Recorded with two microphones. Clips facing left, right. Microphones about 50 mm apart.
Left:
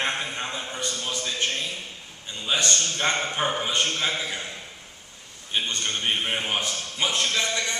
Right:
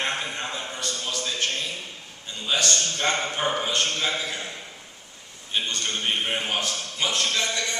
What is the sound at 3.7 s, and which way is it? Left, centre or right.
Speech, left.